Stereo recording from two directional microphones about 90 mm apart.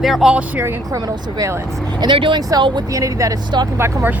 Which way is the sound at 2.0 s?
65° right (ahead or behind).